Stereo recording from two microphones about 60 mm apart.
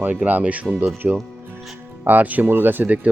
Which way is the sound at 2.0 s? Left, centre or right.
Right.